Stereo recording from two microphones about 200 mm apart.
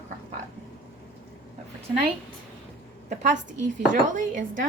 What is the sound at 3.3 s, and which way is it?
A woman's voice, 40° right (ahead or behind).